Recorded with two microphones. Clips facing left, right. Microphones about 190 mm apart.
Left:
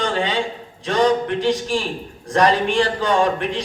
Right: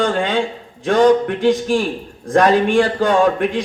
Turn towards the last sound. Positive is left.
turn(degrees=-50)  # may be behind; listen again after turning